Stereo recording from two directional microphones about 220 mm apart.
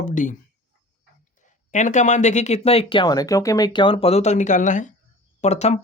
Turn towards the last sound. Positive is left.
turn(degrees=30)  # may be behind; listen again after turning